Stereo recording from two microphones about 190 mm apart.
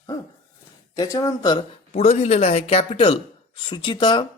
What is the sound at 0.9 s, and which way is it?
Speech, 20° left (ahead or behind).